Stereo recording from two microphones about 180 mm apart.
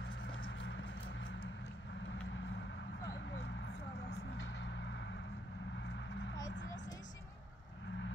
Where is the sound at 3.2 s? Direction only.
90° left.